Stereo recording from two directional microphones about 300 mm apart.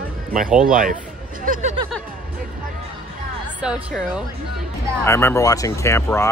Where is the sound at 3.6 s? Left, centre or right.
Centre.